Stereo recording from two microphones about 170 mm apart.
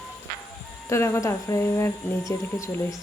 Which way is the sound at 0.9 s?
15° left (ahead or behind).